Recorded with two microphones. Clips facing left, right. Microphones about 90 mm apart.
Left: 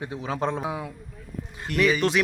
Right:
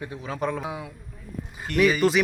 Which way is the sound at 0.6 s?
Centre (ahead or behind).